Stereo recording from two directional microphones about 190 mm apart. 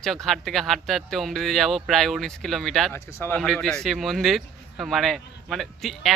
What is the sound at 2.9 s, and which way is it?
Speech, 15° left (ahead or behind).